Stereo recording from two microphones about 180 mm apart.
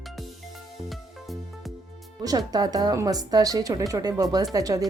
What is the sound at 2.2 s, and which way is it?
A woman's voice, 20° right (ahead or behind).